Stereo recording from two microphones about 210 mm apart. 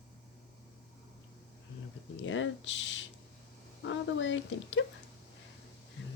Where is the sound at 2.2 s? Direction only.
65° left (ahead or behind).